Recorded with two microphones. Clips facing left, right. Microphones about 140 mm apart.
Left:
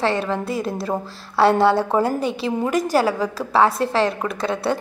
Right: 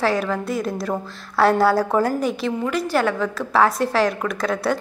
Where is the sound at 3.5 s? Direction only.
Centre (ahead or behind).